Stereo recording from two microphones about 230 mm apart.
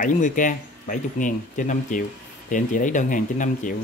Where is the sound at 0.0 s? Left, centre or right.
Left.